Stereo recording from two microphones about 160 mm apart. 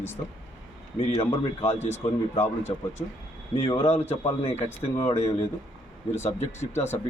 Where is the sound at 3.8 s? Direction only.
10° left (ahead or behind).